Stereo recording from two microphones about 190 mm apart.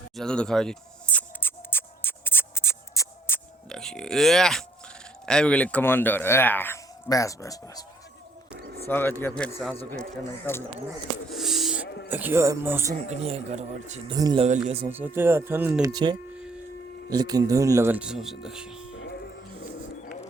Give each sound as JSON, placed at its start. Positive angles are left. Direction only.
{"t": 0.2, "sound": "a sound", "side_deg": 5}
{"t": 5.2, "sound": "speech", "side_deg": 5}
{"t": 8.9, "sound": "speech", "side_deg": 10}
{"t": 11.3, "sound": "a sound", "side_deg": 0}
{"t": 12.0, "sound": "speech", "side_deg": -10}
{"t": 13.1, "sound": "speech", "side_deg": -35}
{"t": 14.1, "sound": "speech", "side_deg": -20}
{"t": 14.8, "sound": "speech", "side_deg": -10}